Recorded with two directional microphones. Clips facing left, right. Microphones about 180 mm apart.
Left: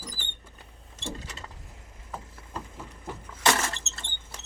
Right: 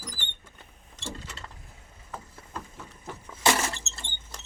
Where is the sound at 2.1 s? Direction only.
10° left (ahead or behind).